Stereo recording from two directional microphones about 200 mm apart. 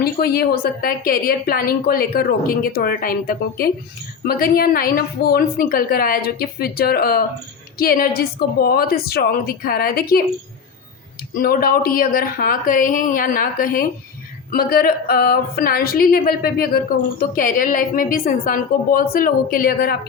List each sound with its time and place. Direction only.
0.0 s a woman's voice: 50° left (ahead or behind)
11.3 s a woman's voice: 50° left (ahead or behind)